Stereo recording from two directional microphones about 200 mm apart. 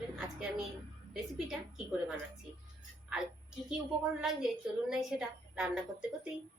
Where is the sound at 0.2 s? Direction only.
Centre (ahead or behind).